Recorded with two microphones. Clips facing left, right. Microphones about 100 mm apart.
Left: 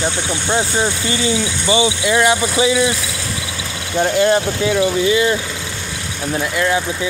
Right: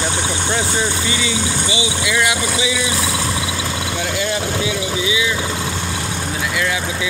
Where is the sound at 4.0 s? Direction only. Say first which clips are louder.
Left 10 dB; 45° left (ahead or behind).